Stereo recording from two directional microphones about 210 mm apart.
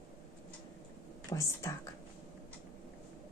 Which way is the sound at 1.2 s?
15° left (ahead or behind).